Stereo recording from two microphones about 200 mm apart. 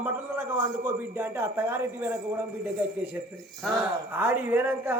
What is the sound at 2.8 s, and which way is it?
Speech, 10° right (ahead or behind).